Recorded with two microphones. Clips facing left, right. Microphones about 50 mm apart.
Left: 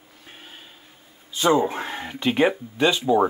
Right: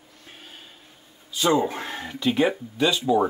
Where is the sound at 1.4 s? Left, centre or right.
Left.